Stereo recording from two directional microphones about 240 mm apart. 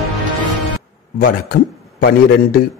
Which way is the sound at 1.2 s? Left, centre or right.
Left.